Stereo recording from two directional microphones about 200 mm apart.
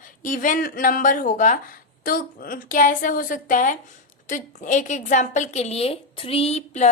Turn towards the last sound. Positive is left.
turn(degrees=35)  # may be behind; listen again after turning